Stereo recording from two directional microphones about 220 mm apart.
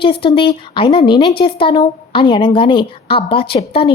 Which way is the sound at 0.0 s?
25° left (ahead or behind).